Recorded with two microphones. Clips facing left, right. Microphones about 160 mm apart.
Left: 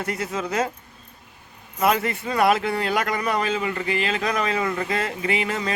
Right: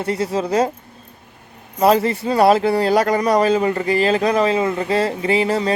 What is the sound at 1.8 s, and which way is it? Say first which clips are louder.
A man's voice: right 7 dB; 30° right (ahead or behind).